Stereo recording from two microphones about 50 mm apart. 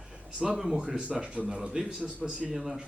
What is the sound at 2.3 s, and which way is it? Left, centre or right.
Speech, right.